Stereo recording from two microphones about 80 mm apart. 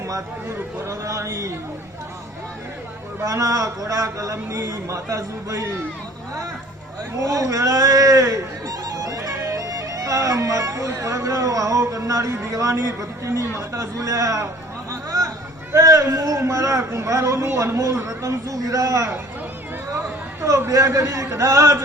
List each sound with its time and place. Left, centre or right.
0.4 s a man's voice: right
3.2 s speech: right
7.2 s speech: right
15.7 s speech: right
20.4 s a man's voice: right